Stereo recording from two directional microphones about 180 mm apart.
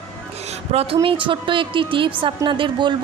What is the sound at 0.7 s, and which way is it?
Speech, 30° right (ahead or behind).